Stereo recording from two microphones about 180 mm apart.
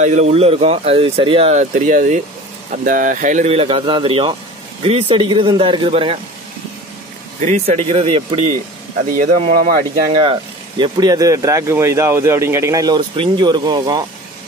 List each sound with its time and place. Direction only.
0.0 s speech: 40° right (ahead or behind)
7.4 s speech: 35° right (ahead or behind)
9.1 s a man's voice: 50° right (ahead or behind)
10.8 s speech: 20° right (ahead or behind)